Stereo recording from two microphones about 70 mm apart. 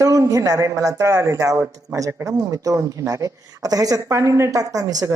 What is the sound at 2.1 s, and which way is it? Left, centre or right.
Speech, right.